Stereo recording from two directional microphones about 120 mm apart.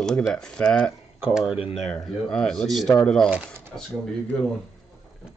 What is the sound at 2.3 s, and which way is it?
Speech, 5° left (ahead or behind).